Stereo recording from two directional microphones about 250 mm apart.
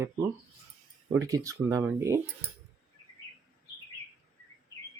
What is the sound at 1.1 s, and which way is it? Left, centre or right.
Speech, centre.